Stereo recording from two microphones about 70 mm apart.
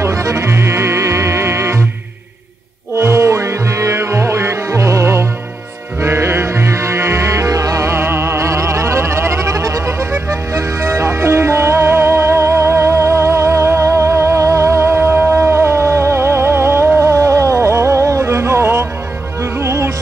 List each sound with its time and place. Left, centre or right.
0.0 s music: right
3.0 s music: right